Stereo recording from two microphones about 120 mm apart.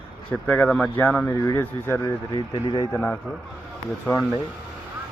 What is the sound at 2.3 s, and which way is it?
Speech, 40° left (ahead or behind).